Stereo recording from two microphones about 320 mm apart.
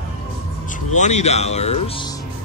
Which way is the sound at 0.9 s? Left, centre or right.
Left.